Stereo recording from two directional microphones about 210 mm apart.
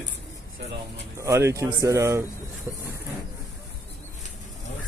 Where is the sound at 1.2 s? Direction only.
15° right (ahead or behind).